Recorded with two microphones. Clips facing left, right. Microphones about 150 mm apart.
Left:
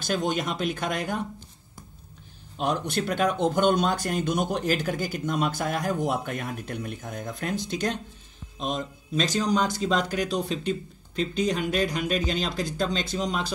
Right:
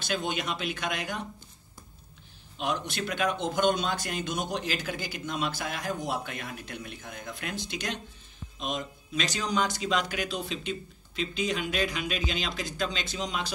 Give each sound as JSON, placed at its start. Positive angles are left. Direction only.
{"t": 0.0, "sound": "speech", "side_deg": 45}
{"t": 2.5, "sound": "speech", "side_deg": 45}